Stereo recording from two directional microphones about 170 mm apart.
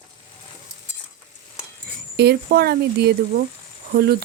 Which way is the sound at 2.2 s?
70° right (ahead or behind).